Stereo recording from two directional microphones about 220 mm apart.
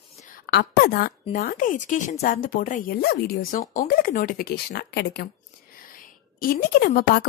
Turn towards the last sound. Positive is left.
turn(degrees=45)  # may be behind; listen again after turning